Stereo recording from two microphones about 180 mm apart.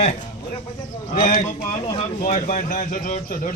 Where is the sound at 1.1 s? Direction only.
45° left (ahead or behind).